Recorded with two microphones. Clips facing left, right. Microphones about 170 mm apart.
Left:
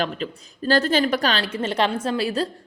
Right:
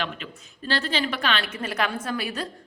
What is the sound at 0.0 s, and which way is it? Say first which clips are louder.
A woman's voice: left 6 dB; 40° left (ahead or behind).